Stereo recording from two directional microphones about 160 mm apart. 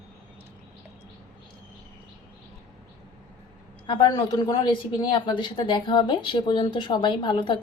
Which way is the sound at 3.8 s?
30° left (ahead or behind).